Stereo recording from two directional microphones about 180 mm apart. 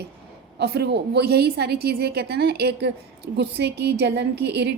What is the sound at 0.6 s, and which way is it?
A woman's voice, 65° right (ahead or behind).